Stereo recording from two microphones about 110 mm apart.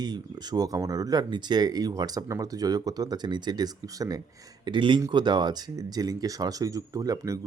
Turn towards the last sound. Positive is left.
turn(degrees=-35)  # may be behind; listen again after turning